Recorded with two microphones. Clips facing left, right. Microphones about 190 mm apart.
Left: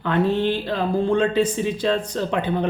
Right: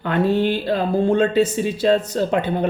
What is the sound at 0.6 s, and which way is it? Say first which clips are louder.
Speech: right 3 dB; 45° right (ahead or behind).